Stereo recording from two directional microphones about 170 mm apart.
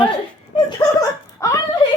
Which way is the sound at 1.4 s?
20° left (ahead or behind).